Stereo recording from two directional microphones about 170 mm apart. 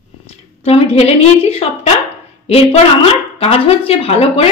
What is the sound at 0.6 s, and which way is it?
A woman's voice, 35° left (ahead or behind).